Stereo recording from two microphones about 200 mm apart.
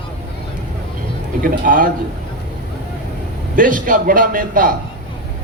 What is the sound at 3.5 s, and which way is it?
A man's voice, 40° right (ahead or behind).